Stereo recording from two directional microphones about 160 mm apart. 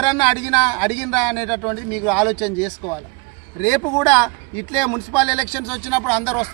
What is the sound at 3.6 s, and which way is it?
Speech, 10° left (ahead or behind).